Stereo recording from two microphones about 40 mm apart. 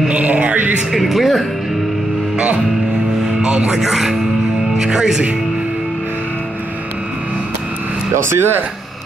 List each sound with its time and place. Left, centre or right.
0.1 s music: right
0.9 s speech: centre
3.4 s speech: right
3.7 s speech: centre
8.3 s speech: right